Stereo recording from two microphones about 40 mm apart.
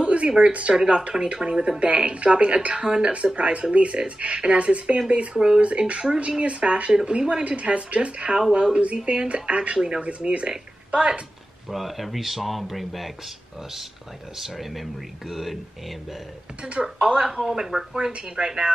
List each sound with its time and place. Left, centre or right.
0.0 s a sound: right
0.4 s speech: right
11.7 s speech: centre
14.3 s speech: centre
17.0 s speech: right
17.9 s speech: right